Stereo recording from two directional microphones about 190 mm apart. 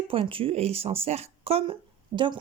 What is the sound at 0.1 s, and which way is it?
A woman's voice, 30° right (ahead or behind).